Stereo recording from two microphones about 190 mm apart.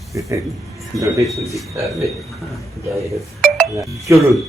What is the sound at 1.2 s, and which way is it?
Speech, centre (ahead or behind).